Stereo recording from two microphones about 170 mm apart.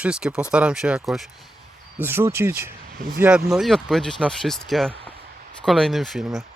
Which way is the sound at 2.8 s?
60° right (ahead or behind).